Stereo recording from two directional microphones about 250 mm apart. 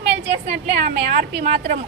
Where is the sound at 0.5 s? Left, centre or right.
Right.